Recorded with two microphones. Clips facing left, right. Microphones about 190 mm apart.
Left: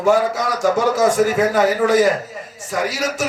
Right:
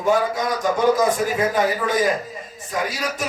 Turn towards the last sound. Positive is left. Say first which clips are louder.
# left 4 dB
turn(degrees=80)